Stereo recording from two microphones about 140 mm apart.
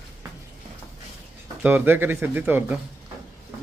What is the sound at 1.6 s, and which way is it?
Speech, 10° right (ahead or behind).